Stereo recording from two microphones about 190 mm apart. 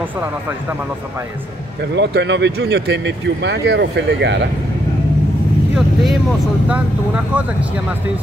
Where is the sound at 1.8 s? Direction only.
65° right (ahead or behind).